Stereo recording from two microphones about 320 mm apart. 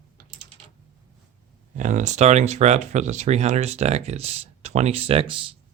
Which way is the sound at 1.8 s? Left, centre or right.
Right.